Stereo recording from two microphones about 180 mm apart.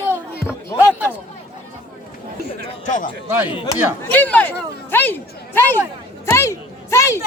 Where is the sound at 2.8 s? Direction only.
45° left (ahead or behind).